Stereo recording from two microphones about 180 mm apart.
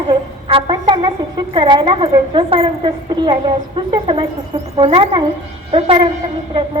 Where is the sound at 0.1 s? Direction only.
25° right (ahead or behind).